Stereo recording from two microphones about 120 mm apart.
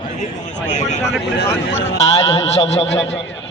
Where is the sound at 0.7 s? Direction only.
75° left (ahead or behind).